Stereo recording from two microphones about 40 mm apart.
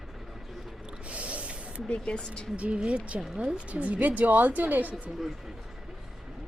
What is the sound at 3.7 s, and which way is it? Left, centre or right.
Speech, right.